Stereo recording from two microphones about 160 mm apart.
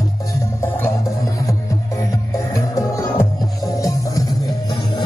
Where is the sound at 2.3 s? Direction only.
20° left (ahead or behind).